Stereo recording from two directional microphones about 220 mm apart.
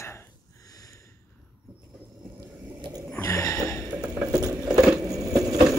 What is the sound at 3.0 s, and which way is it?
Snort, 10° left (ahead or behind).